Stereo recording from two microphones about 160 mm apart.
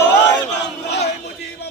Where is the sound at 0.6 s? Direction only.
90° left.